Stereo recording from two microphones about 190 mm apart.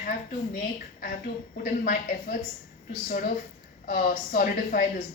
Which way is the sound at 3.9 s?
45° left (ahead or behind).